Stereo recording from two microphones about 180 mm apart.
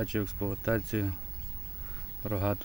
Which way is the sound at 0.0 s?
Centre (ahead or behind).